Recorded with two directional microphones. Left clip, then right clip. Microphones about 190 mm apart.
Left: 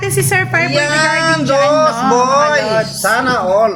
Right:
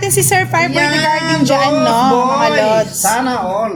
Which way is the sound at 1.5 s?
15° right (ahead or behind).